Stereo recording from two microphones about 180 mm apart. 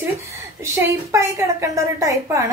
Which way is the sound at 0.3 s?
15° right (ahead or behind).